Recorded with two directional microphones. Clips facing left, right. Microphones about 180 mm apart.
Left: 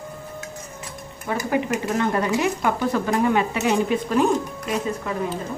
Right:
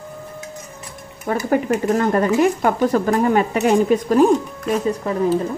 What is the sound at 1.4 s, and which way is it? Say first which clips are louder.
Speech: right 5 dB; 45° right (ahead or behind).